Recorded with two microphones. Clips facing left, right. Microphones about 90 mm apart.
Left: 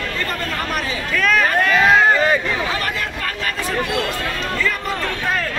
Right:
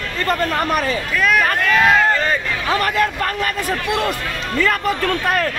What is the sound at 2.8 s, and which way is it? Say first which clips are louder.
Music: right 6 dB; 45° right (ahead or behind).